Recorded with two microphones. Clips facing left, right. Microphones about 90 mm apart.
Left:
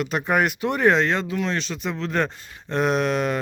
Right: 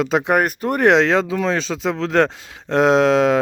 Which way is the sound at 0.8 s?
90° right.